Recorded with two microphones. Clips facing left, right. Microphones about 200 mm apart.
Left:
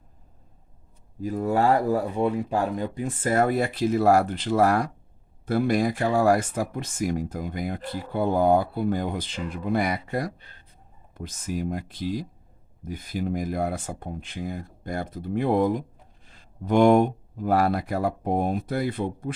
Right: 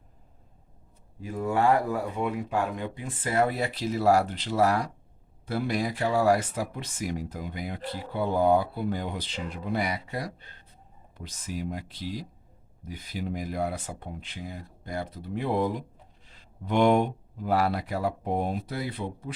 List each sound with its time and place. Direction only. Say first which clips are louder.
1.2 s speech: left 3 dB; 40° left (ahead or behind)